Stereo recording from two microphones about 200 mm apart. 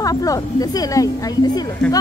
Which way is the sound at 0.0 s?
15° left (ahead or behind).